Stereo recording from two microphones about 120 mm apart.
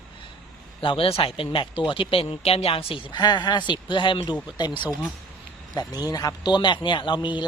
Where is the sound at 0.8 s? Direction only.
50° left (ahead or behind).